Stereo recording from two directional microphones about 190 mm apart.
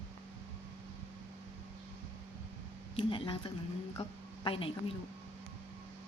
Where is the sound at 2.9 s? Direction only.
25° left (ahead or behind).